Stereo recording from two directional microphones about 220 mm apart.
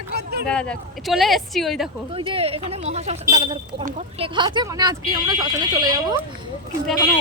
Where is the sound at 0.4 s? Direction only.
5° left (ahead or behind).